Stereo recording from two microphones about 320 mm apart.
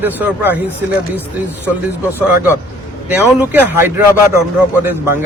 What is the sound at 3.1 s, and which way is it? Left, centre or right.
A man's voice, centre.